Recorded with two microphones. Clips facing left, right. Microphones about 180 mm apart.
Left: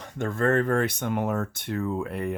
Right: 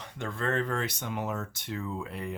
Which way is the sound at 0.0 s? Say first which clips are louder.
Left 8 dB; 45° left (ahead or behind).